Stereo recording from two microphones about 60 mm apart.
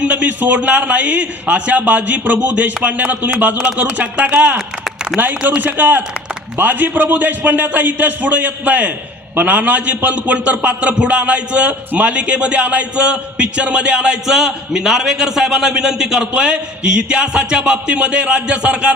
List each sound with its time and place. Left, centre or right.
0.0 s a man's voice: right